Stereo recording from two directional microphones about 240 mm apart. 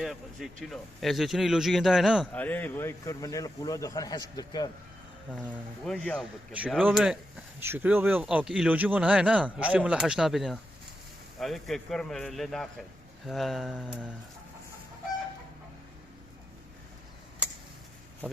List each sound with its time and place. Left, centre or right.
0.0 s a man's voice: centre
5.5 s a man's voice: centre